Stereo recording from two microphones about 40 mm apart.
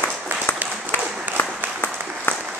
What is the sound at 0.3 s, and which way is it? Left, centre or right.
Applause, right.